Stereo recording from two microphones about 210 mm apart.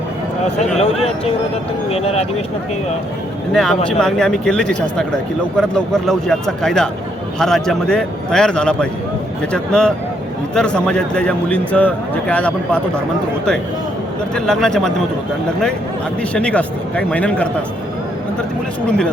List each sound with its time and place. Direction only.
0.8 s speech: 30° left (ahead or behind)
3.5 s speech: centre (ahead or behind)
14.3 s speech: 5° left (ahead or behind)
16.3 s speech: 5° left (ahead or behind)
18.9 s speech: 5° left (ahead or behind)